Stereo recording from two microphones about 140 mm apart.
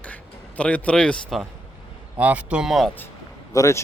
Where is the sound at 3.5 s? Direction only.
20° left (ahead or behind).